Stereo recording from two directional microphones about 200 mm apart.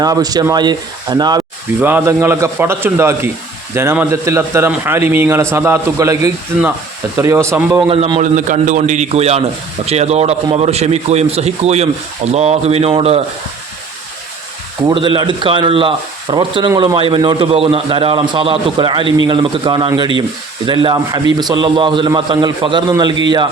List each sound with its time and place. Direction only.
0.0 s a man's voice: 20° right (ahead or behind)
7.9 s speech: 25° right (ahead or behind)
8.2 s a man's voice: 40° right (ahead or behind)
14.8 s speech: 25° right (ahead or behind)